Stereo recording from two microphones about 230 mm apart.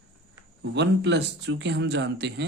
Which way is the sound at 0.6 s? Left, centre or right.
Right.